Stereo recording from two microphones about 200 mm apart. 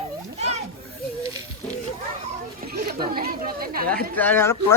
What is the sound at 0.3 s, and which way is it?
Children playing, 35° right (ahead or behind).